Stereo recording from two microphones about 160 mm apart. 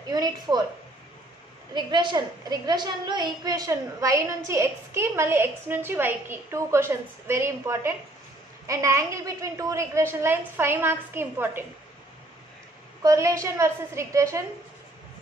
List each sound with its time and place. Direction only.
0.1 s a woman's voice: 25° right (ahead or behind)
1.7 s a woman's voice: 30° right (ahead or behind)
13.0 s a woman's voice: 20° right (ahead or behind)